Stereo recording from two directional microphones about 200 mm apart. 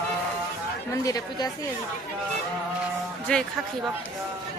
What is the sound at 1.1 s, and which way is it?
Speech, 20° left (ahead or behind).